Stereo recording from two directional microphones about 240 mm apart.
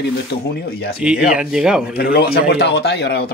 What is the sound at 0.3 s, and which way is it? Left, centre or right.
Speech, left.